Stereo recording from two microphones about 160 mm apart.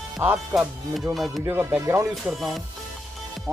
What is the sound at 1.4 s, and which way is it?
Speech, 15° right (ahead or behind).